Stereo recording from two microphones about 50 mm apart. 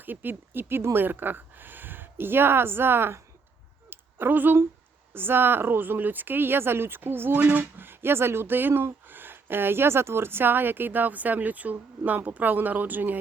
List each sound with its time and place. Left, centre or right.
0.0 s speech: right
3.8 s a sound: right
5.1 s a woman's voice: right